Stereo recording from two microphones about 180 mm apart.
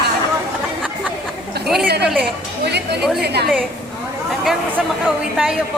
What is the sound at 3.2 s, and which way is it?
Speech, 65° right (ahead or behind).